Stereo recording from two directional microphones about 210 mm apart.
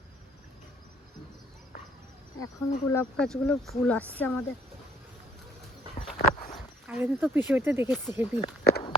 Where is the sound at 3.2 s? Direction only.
Centre (ahead or behind).